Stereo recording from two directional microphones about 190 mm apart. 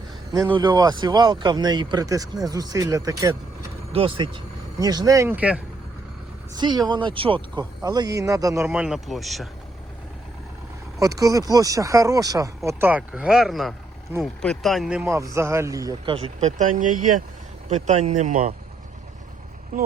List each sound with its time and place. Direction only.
0.3 s speech: 20° right (ahead or behind)
3.9 s speech: 30° right (ahead or behind); by 5.5 s 10° right (ahead or behind)
6.6 s speech: 20° right (ahead or behind); by 9.5 s centre (ahead or behind)
11.0 s speech: 20° right (ahead or behind)
15.1 s speech: 15° right (ahead or behind)
16.1 s speech: 35° right (ahead or behind)